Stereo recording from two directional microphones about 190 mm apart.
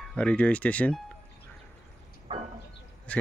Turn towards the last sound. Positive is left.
turn(degrees=5)  # may be behind; listen again after turning